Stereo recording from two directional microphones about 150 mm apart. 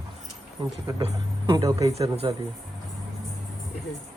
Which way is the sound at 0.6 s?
35° right (ahead or behind).